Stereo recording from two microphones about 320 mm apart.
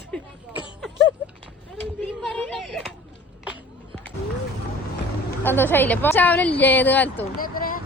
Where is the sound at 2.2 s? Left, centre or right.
Centre.